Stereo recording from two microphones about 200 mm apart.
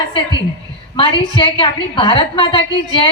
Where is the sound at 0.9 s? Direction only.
25° left (ahead or behind).